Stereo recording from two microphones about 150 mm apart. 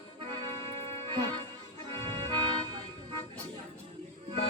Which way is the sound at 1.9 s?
30° right (ahead or behind).